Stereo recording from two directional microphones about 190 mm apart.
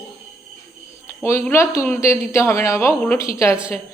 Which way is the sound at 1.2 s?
15° left (ahead or behind).